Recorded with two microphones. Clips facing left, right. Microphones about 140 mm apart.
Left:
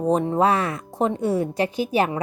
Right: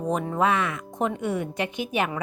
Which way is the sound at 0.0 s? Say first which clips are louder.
Left 5 dB; 30° left (ahead or behind).